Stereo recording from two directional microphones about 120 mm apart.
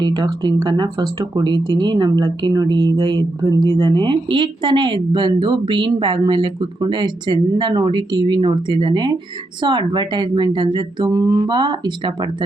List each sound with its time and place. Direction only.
0.0 s speech: 35° right (ahead or behind)